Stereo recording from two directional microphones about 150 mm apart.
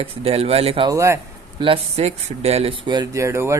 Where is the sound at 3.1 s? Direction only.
20° right (ahead or behind).